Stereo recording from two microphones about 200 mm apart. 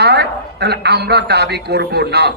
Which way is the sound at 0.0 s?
55° right (ahead or behind).